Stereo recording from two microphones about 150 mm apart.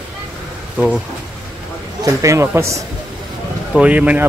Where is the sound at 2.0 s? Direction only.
20° right (ahead or behind).